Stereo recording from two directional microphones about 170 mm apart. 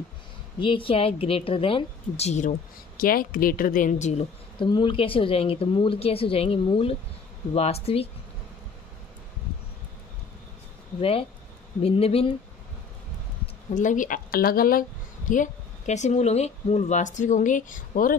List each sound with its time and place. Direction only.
0.6 s a woman's voice: 30° left (ahead or behind)
3.0 s speech: 55° left (ahead or behind)
4.6 s a woman's voice: 30° left (ahead or behind)
11.0 s a woman's voice: 35° left (ahead or behind)
13.7 s speech: 50° left (ahead or behind)